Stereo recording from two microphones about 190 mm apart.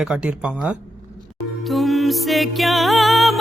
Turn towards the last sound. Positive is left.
turn(degrees=0)  # may be behind; listen again after turning